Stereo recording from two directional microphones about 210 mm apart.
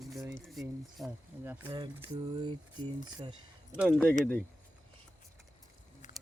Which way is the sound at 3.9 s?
5° left (ahead or behind).